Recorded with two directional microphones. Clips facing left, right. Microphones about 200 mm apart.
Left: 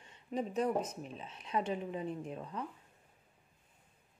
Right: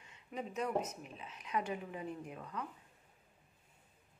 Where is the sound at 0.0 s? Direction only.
35° left (ahead or behind).